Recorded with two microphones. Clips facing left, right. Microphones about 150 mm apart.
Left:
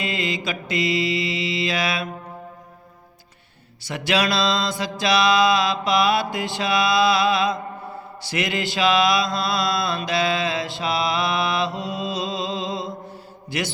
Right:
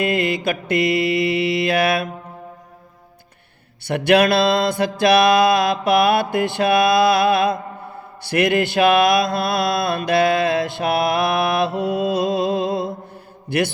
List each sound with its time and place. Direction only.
0.0 s mantra: 55° right (ahead or behind)
3.8 s mantra: 60° right (ahead or behind)